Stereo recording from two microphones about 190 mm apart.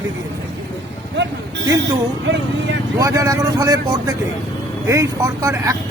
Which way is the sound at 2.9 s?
15° right (ahead or behind).